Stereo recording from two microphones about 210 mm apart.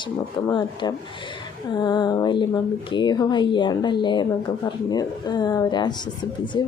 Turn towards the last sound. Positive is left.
turn(degrees=20)  # may be behind; listen again after turning